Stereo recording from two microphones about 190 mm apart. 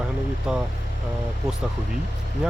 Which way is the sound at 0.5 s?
5° right (ahead or behind).